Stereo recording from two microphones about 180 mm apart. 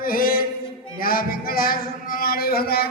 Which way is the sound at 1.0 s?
55° left (ahead or behind).